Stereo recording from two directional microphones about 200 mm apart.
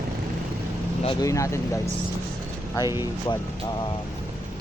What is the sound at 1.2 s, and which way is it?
Speech, 15° left (ahead or behind).